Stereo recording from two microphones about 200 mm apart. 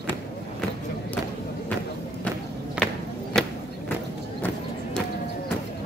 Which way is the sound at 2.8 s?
5° right (ahead or behind).